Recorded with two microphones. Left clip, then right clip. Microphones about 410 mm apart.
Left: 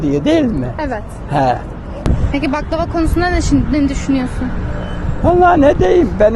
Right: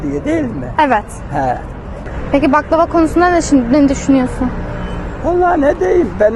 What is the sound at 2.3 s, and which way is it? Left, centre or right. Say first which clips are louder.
Speech: right 8 dB; centre.